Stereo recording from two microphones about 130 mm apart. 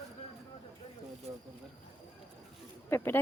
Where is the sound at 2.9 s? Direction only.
20° left (ahead or behind).